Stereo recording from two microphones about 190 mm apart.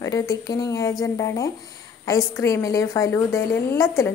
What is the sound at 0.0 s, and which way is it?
A woman's voice, 15° left (ahead or behind).